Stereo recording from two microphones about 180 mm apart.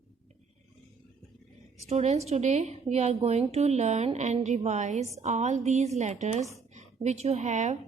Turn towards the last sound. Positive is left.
turn(degrees=-40)  # may be behind; listen again after turning